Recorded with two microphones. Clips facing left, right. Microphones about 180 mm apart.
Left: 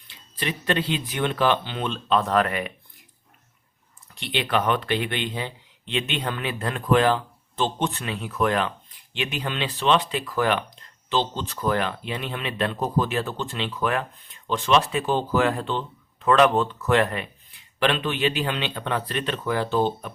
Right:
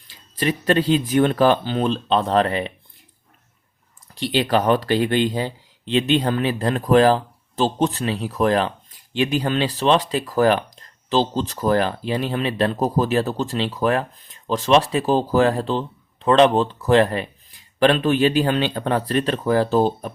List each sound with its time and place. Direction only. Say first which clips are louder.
0.1 s speech: right 7 dB; 40° right (ahead or behind)
4.1 s speech: right 6 dB; 35° right (ahead or behind)